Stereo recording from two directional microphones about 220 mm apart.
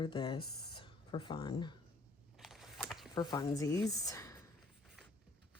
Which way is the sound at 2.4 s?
Centre (ahead or behind).